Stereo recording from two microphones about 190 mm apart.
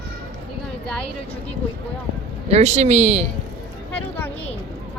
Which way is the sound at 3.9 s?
10° left (ahead or behind).